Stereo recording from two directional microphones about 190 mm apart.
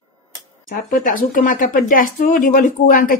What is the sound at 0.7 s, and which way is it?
Speech, 45° left (ahead or behind).